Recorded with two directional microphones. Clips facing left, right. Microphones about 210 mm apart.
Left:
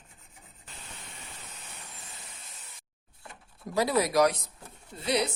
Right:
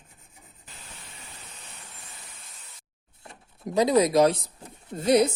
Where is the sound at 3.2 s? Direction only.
20° right (ahead or behind).